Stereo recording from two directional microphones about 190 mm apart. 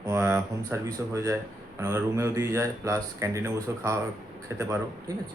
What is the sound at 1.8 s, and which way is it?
A man's voice, 15° right (ahead or behind).